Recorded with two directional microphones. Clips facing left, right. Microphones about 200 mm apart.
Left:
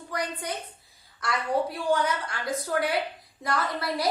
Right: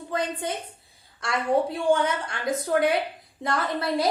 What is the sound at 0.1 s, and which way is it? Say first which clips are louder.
A woman's voice: right 4 dB; 25° right (ahead or behind).